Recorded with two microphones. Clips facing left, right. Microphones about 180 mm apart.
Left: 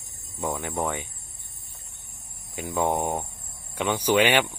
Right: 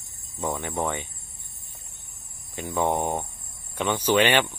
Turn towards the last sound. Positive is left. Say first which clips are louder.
# even
turn(degrees=10)  # may be behind; listen again after turning